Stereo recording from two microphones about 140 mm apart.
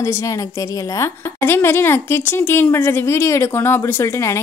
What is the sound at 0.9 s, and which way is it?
A woman's voice, 20° left (ahead or behind).